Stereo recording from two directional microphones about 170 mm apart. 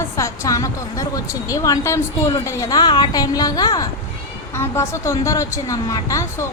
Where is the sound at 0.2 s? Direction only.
20° left (ahead or behind).